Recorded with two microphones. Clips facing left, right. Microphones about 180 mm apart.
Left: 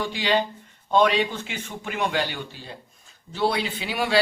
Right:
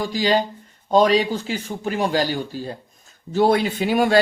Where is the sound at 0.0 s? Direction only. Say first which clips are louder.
Right 4 dB; 40° right (ahead or behind).